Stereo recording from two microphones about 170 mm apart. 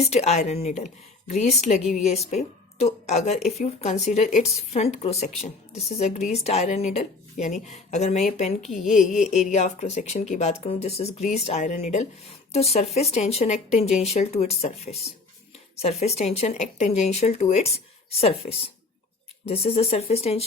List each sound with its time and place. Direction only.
0.0 s speech: 40° left (ahead or behind)
8.6 s a woman's voice: centre (ahead or behind)
9.2 s speech: 40° left (ahead or behind)